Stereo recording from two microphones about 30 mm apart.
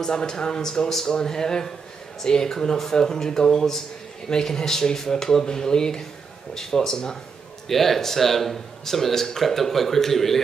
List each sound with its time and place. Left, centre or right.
0.0 s speech: left
7.6 s speech: centre